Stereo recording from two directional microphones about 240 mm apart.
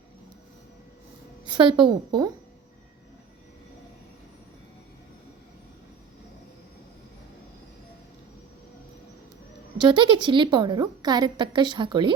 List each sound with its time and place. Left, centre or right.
1.5 s a woman's voice: centre
9.7 s a woman's voice: centre